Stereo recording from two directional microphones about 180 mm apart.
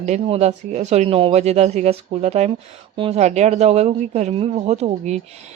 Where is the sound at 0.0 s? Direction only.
40° right (ahead or behind).